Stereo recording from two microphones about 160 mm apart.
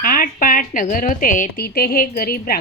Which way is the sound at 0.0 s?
65° left (ahead or behind).